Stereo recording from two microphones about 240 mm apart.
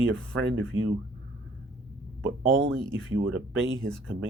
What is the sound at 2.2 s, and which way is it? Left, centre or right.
Speech, right.